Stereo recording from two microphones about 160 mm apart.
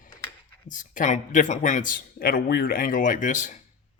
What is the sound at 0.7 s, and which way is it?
A man's voice, 50° left (ahead or behind).